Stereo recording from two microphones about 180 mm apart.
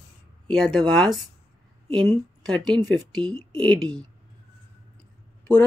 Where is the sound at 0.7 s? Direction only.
Centre (ahead or behind).